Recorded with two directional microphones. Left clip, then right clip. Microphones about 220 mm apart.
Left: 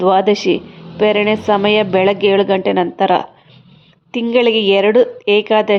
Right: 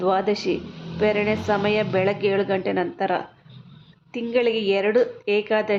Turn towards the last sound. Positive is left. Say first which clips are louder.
# left 9 dB
turn(degrees=25)  # may be behind; listen again after turning